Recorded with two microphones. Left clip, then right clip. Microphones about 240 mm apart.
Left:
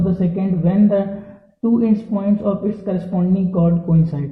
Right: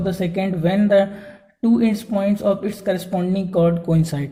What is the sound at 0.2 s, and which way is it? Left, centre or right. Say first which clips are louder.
A man's voice: right 1 dB; right.